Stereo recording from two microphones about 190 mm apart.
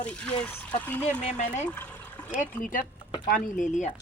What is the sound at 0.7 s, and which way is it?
Speech, 10° left (ahead or behind).